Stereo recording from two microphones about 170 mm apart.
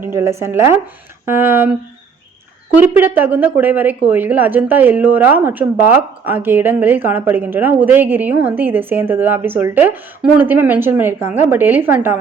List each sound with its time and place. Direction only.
0.0 s speech: 15° right (ahead or behind)
2.7 s speech: 10° right (ahead or behind)